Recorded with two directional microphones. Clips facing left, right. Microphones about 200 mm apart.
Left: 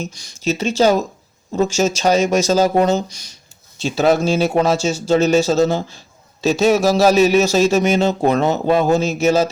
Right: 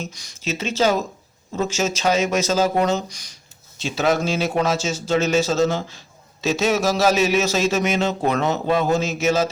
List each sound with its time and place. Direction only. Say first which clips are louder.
0.1 s a man's voice: left 7 dB; 30° left (ahead or behind)